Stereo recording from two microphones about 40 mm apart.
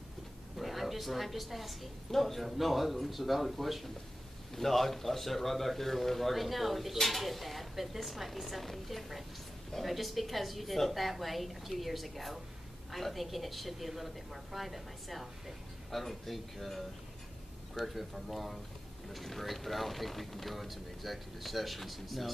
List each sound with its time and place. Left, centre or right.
0.6 s speech: centre